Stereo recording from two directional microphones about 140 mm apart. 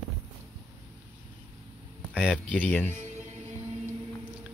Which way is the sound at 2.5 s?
10° left (ahead or behind).